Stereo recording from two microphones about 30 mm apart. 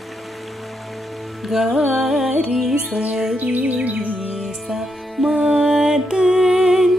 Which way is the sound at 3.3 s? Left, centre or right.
Right.